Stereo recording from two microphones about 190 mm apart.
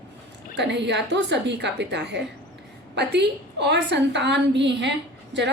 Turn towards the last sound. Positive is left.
turn(degrees=-70)  # may be behind; listen again after turning